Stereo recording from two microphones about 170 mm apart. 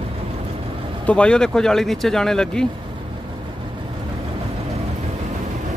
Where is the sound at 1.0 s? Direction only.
5° left (ahead or behind).